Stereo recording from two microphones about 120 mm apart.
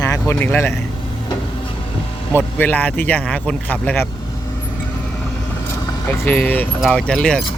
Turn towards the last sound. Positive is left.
turn(degrees=10)  # may be behind; listen again after turning